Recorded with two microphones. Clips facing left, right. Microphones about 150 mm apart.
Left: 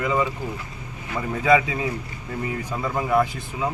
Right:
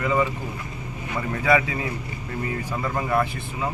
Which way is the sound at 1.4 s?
15° left (ahead or behind).